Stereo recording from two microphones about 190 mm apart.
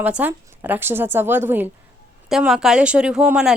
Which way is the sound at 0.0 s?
10° right (ahead or behind).